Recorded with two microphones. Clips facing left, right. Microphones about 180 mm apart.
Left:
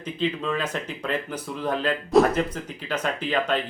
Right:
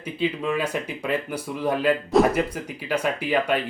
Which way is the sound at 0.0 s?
10° right (ahead or behind).